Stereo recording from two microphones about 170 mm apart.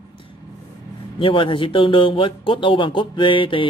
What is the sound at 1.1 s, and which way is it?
Speech, 30° left (ahead or behind).